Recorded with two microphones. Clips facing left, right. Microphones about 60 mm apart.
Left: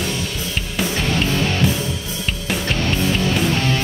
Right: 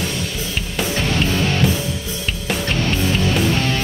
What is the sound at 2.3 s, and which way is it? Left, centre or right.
Music, centre.